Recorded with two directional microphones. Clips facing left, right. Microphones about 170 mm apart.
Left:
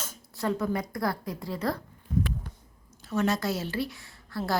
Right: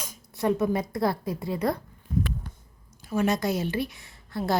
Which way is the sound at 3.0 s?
15° right (ahead or behind).